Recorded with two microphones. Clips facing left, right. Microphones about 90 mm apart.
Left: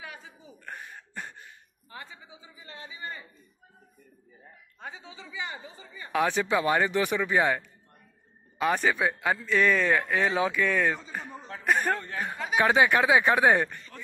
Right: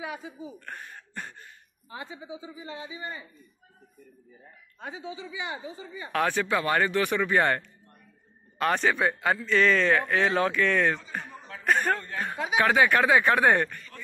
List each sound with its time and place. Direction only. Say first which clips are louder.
0.0 s speech: right 7 dB; 15° right (ahead or behind)
0.7 s speech: even; 15° left (ahead or behind)
1.9 s a man's voice: right 6 dB; 20° right (ahead or behind)
4.7 s a man's voice: right 5 dB; 5° right (ahead or behind)
6.1 s a man's voice: left 1 dB; 15° left (ahead or behind)
8.5 s a man's voice: right 1 dB; 5° left (ahead or behind); by 13.9 s 20° left (ahead or behind)